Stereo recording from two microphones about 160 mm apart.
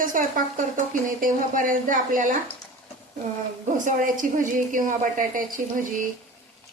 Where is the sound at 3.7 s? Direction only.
55° right (ahead or behind).